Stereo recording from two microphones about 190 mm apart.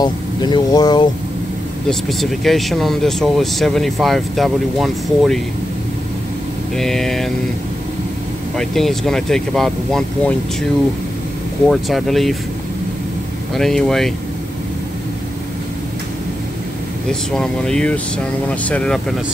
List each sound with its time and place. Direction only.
0.0 s speech: 20° left (ahead or behind)
1.9 s speech: centre (ahead or behind)
6.8 s speech: centre (ahead or behind)
8.5 s speech: centre (ahead or behind)
11.7 s speech: centre (ahead or behind)
13.6 s speech: centre (ahead or behind)
17.1 s speech: 5° left (ahead or behind)